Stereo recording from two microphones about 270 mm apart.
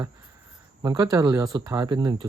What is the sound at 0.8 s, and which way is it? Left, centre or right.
Cricket, centre.